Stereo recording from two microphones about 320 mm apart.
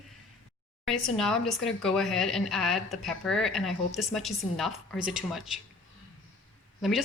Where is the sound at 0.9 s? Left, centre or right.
Centre.